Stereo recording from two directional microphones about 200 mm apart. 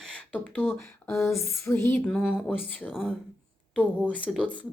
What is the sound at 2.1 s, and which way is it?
Speech, centre (ahead or behind).